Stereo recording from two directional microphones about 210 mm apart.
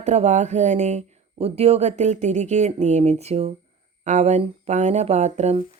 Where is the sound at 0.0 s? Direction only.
35° right (ahead or behind).